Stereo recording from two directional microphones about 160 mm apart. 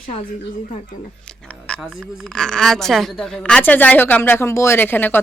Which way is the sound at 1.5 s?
5° left (ahead or behind).